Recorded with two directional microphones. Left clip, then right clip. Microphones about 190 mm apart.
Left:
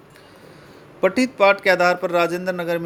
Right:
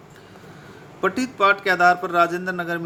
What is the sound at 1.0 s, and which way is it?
Speech, 25° left (ahead or behind).